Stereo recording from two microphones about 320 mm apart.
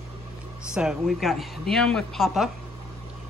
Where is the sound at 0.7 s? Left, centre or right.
Centre.